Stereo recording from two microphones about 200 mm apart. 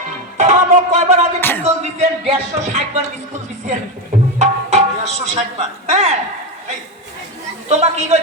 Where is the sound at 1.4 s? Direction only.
10° left (ahead or behind).